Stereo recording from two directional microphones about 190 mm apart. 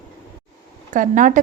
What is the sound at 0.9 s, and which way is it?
Speech, 40° right (ahead or behind).